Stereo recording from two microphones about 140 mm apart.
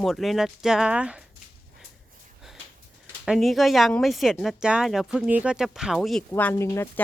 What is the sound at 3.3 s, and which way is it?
Speech, centre (ahead or behind).